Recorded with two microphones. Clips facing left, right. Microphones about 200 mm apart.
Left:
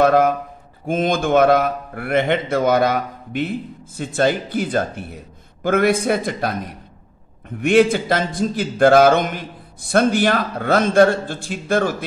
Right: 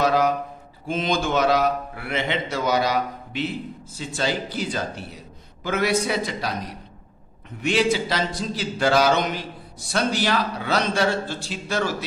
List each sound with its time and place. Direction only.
0.0 s a man's voice: 55° left (ahead or behind)